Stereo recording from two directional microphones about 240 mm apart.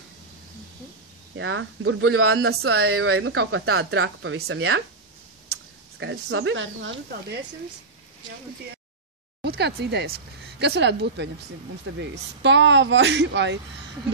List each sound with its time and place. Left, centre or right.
1.3 s speech: right
2.6 s speech: right
2.9 s speech: right
9.4 s speech: right